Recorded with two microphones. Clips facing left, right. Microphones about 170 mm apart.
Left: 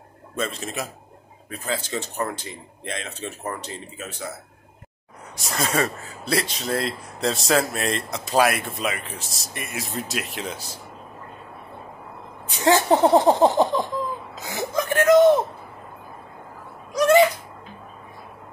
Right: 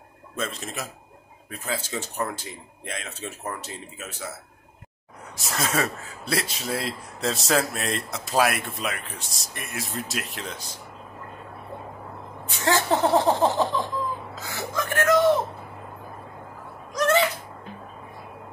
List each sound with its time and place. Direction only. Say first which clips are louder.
0.4 s speech: left 3 dB; centre (ahead or behind)
5.3 s speech: left 2 dB; centre (ahead or behind)
12.4 s speech: left 5 dB; 20° left (ahead or behind)
14.3 s whimper: left 5 dB; 15° left (ahead or behind)
16.9 s a sound: left 5 dB; 15° left (ahead or behind)